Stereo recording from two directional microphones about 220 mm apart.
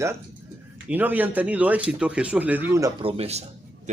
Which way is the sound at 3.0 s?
25° right (ahead or behind).